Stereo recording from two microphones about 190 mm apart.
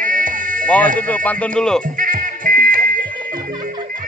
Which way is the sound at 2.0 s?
45° right (ahead or behind).